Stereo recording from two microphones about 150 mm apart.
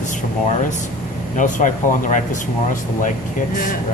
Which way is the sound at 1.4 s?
60° left (ahead or behind).